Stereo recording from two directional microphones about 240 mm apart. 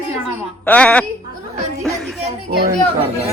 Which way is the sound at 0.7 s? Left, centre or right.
Centre.